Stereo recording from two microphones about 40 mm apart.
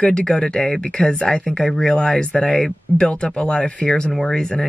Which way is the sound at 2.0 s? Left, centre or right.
Left.